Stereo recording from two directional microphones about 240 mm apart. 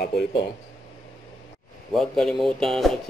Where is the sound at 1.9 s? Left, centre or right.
Centre.